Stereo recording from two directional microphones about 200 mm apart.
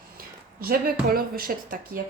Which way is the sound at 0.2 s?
45° right (ahead or behind).